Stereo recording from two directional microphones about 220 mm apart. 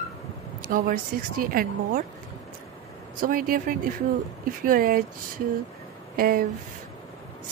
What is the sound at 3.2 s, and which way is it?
Speech, 40° right (ahead or behind).